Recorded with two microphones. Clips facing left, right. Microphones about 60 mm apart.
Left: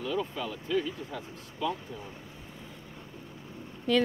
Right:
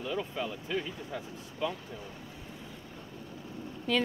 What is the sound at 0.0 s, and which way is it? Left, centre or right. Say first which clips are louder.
Speech: left 2 dB; centre.